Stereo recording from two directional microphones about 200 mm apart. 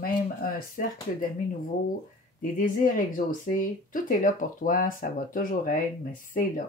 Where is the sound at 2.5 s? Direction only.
40° left (ahead or behind).